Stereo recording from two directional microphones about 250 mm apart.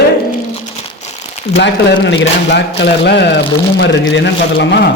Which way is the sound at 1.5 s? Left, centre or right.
Left.